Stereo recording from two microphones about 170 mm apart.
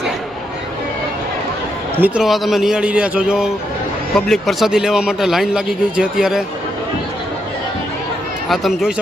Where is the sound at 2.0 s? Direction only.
5° right (ahead or behind).